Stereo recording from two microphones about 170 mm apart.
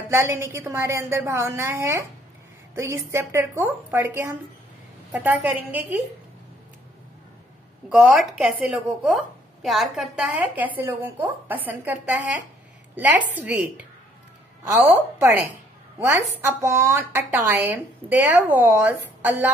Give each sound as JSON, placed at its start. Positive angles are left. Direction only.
{"t": 0.1, "sound": "a woman's voice", "side_deg": -15}
{"t": 7.9, "sound": "a woman's voice", "side_deg": -5}